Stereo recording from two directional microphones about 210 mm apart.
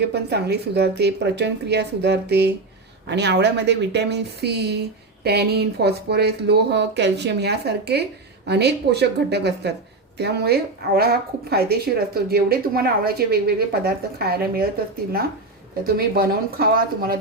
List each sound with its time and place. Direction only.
0.0 s a woman's voice: 50° right (ahead or behind)
16.0 s a woman's voice: 45° right (ahead or behind)